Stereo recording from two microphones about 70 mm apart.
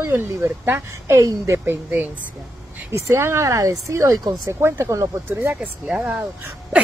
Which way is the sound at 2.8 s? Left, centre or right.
Right.